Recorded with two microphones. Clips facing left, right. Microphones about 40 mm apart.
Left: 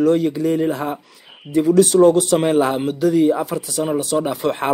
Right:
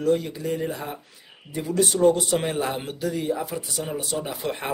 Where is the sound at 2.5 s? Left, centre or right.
Left.